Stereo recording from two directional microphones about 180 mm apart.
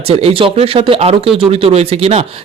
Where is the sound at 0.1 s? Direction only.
35° right (ahead or behind).